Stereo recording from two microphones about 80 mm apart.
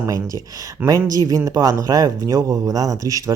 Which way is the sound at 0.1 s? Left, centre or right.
Right.